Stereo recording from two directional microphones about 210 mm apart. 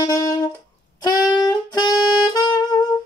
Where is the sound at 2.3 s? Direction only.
20° left (ahead or behind).